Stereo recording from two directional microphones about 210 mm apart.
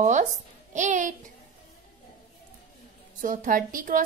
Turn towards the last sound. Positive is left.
turn(degrees=-40)  # may be behind; listen again after turning